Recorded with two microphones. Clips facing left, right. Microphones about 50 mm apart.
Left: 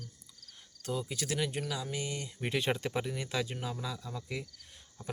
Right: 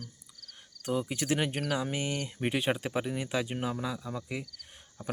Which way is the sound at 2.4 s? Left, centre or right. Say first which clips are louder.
Right 2 dB; centre.